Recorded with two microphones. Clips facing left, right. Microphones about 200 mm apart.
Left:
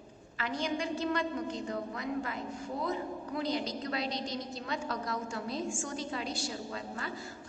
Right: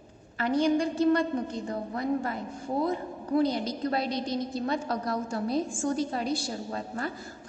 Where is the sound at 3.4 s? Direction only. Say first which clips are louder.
Right 5 dB; 55° right (ahead or behind).